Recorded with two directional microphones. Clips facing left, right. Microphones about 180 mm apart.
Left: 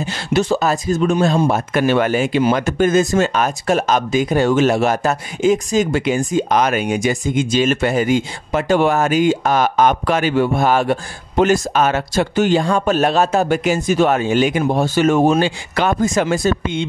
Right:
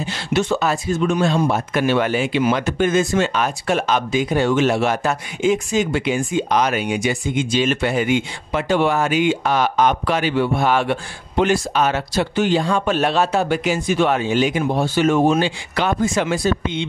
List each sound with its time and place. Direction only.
0.0 s speech: 40° left (ahead or behind)